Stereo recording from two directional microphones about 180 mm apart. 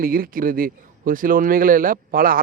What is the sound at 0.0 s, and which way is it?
Speech, 55° right (ahead or behind).